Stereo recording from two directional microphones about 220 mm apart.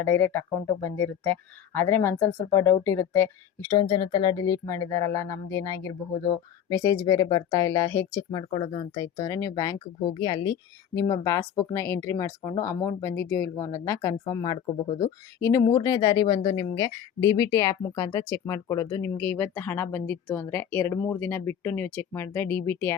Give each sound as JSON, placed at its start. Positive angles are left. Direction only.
{"t": 0.0, "sound": "speech", "side_deg": 10}